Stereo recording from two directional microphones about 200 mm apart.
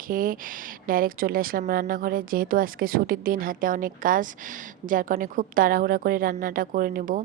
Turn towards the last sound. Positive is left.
turn(degrees=-45)  # may be behind; listen again after turning